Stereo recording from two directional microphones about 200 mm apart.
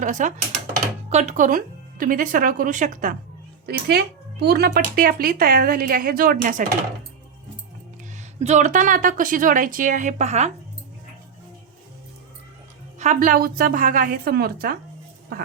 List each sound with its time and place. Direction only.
0.0 s speech: 40° right (ahead or behind)
3.7 s speech: 55° right (ahead or behind)
8.4 s speech: 35° right (ahead or behind)
13.0 s speech: 40° right (ahead or behind)